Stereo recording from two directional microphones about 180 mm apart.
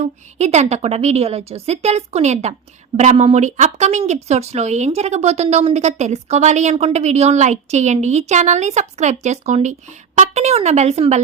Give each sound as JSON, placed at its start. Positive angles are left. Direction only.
{"t": 0.0, "sound": "speech", "side_deg": -40}